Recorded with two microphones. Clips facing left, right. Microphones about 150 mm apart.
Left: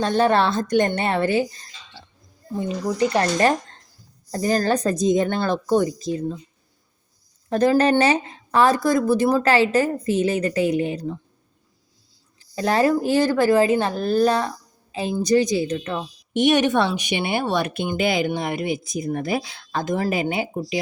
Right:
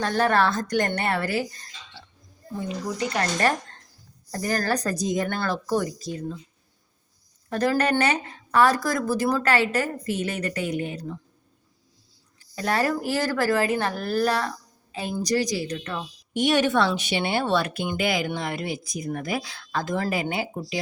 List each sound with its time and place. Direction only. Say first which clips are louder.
0.0 s a woman's voice: left 3 dB; 20° left (ahead or behind)
3.2 s a woman's voice: left 2 dB; 25° left (ahead or behind)
7.5 s a woman's voice: left 5 dB; 25° left (ahead or behind)
12.5 s a woman's voice: left 6 dB; 25° left (ahead or behind)